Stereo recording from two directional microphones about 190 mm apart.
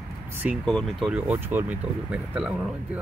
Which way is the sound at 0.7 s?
Centre (ahead or behind).